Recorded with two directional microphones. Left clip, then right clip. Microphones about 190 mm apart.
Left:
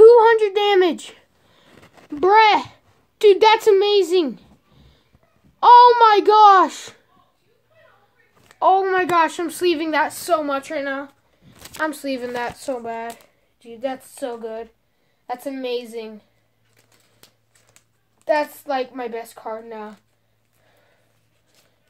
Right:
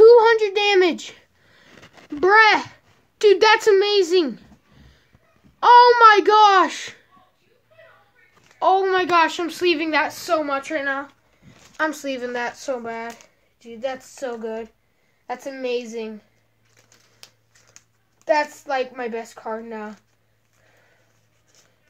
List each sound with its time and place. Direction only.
0.0 s a sound: 5° left (ahead or behind)
5.6 s a child's voice: 10° left (ahead or behind)
8.5 s a child's voice: 10° left (ahead or behind); by 11.5 s 35° left (ahead or behind)
11.8 s a woman's voice: 25° left (ahead or behind)
18.2 s speech: 35° left (ahead or behind)